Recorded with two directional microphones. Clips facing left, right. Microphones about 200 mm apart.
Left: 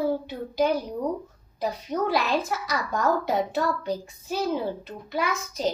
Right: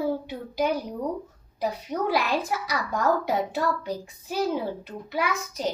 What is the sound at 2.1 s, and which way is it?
A child's voice, 10° right (ahead or behind).